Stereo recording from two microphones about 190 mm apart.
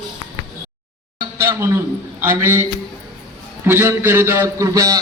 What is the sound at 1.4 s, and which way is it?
A man's voice, 15° right (ahead or behind).